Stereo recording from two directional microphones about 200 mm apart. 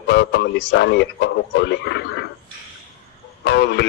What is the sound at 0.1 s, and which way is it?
A man's voice, 60° left (ahead or behind).